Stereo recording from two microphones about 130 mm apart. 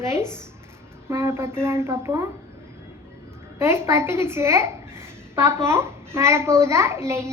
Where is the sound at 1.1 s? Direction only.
20° right (ahead or behind).